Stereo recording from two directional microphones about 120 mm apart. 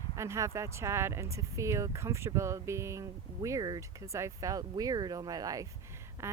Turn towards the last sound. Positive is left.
turn(degrees=-20)  # may be behind; listen again after turning